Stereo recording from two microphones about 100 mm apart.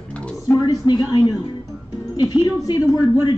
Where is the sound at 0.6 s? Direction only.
45° left (ahead or behind).